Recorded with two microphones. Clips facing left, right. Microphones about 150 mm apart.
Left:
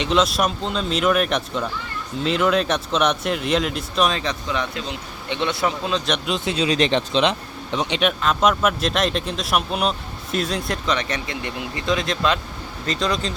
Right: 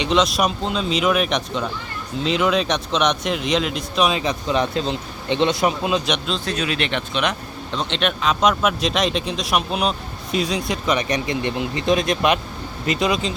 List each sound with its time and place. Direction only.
0.0 s speech: centre (ahead or behind)
4.4 s speech: 20° right (ahead or behind)
6.2 s speech: 20° left (ahead or behind)
6.7 s speech: 30° left (ahead or behind); by 10.8 s centre (ahead or behind)
10.8 s speech: 15° right (ahead or behind)